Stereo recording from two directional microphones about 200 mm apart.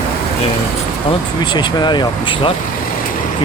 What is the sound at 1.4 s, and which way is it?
Speech, 20° left (ahead or behind).